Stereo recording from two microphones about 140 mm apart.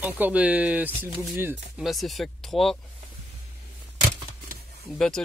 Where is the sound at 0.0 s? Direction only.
10° right (ahead or behind).